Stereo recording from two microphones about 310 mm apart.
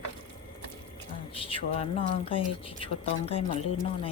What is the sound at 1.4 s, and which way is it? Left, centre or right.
A woman's voice, centre.